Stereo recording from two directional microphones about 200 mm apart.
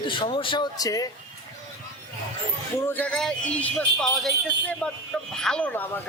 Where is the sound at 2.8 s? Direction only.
10° left (ahead or behind).